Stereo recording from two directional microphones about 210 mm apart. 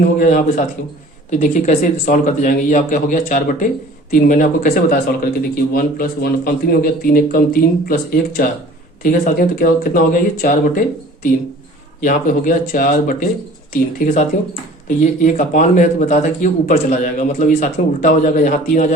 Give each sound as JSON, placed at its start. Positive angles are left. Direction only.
{"t": 0.0, "sound": "a man's voice", "side_deg": 40}